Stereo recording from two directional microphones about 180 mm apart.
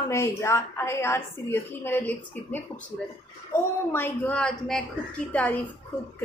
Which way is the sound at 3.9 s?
10° left (ahead or behind).